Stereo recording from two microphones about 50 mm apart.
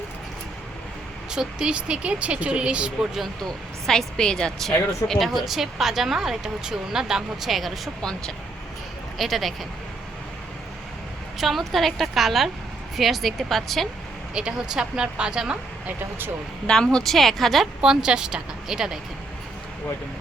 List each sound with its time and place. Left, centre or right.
1.3 s speech: centre
3.4 s speech: centre
4.6 s speech: centre
9.1 s speech: centre
11.3 s speech: centre
14.3 s speech: centre
16.6 s speech: centre
17.7 s speech: centre